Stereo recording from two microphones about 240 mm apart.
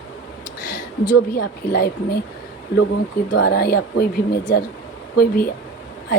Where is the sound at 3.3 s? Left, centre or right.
Left.